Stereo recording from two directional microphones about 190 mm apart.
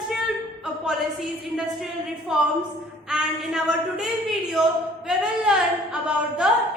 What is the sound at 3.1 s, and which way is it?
A woman's voice, 5° right (ahead or behind).